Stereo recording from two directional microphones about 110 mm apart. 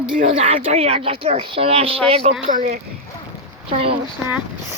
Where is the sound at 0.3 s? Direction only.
65° right (ahead or behind).